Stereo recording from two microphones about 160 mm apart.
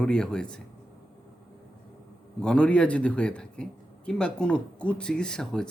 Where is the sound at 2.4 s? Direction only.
5° left (ahead or behind).